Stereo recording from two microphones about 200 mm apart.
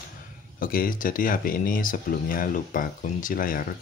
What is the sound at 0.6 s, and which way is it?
Speech, 45° left (ahead or behind).